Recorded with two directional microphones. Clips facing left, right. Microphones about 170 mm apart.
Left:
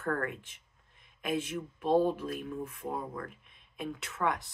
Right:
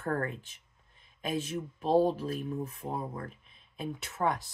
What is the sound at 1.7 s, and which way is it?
Speech, 35° right (ahead or behind).